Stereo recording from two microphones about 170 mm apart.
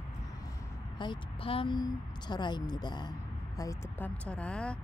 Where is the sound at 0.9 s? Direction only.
30° left (ahead or behind).